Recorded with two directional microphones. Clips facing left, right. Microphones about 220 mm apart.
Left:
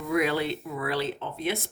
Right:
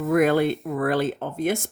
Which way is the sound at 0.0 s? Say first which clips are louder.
Right 7 dB; 50° right (ahead or behind).